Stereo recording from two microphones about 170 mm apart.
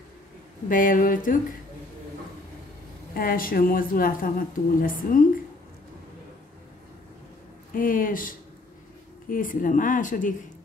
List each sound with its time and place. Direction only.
0.7 s speech: 55° left (ahead or behind)
3.2 s a woman's voice: 55° left (ahead or behind)
7.7 s a woman's voice: 55° left (ahead or behind)